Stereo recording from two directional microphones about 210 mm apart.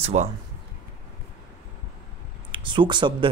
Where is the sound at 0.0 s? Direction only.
35° right (ahead or behind).